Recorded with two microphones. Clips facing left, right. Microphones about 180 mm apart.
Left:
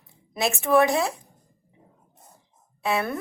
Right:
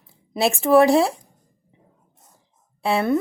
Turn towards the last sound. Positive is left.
turn(degrees=-25)  # may be behind; listen again after turning